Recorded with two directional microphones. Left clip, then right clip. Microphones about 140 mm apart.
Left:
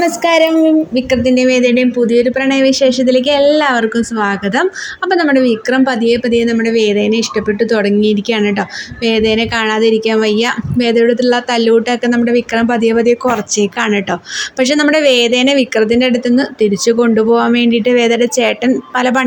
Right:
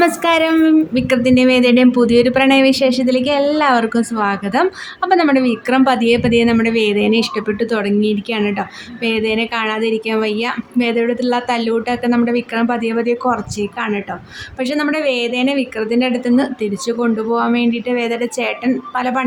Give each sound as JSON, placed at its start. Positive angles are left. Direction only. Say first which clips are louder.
{"t": 0.0, "sound": "speech", "louder": "left 3 dB", "side_deg": 5}
{"t": 2.0, "sound": "a woman's voice", "louder": "left 1 dB", "side_deg": -5}
{"t": 13.7, "sound": "a woman's voice", "louder": "left 6 dB", "side_deg": 30}